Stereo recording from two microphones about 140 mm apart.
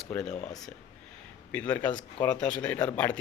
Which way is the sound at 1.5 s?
10° left (ahead or behind).